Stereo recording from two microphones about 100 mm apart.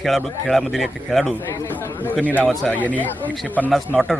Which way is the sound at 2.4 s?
Centre (ahead or behind).